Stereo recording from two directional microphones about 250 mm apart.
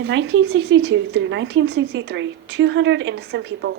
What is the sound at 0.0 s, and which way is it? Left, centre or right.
Speech, right.